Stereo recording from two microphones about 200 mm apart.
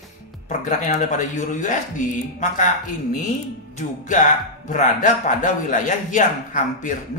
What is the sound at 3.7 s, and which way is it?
Speech, 40° left (ahead or behind).